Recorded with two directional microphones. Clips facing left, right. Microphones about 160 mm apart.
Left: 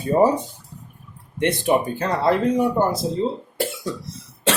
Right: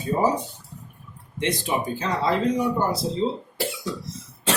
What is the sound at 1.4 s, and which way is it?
Speech, 60° left (ahead or behind).